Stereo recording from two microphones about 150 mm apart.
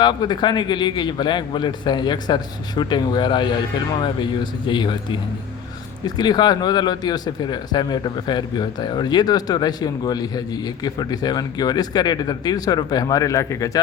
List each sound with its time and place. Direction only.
0.0 s a man's voice: 30° left (ahead or behind)